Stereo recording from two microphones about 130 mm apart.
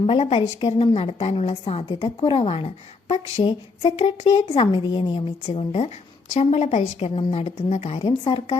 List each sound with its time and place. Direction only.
0.0 s a woman's voice: 50° left (ahead or behind)
3.4 s a woman's voice: 45° left (ahead or behind)
4.6 s a woman's voice: 35° left (ahead or behind); by 8.0 s 55° left (ahead or behind)
8.0 s a woman's voice: 45° left (ahead or behind)